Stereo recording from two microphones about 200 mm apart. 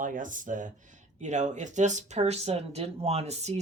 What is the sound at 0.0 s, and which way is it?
Speech, 40° right (ahead or behind).